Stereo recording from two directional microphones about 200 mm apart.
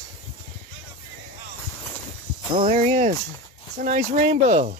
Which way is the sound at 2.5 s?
35° right (ahead or behind).